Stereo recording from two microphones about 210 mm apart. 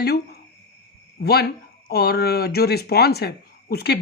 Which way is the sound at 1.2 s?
45° left (ahead or behind).